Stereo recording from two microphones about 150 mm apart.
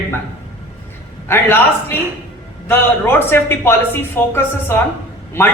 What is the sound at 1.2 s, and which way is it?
Speech, 15° left (ahead or behind).